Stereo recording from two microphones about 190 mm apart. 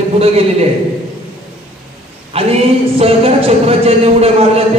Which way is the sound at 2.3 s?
30° right (ahead or behind).